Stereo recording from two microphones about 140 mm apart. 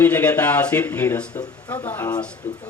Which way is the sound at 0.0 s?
10° left (ahead or behind).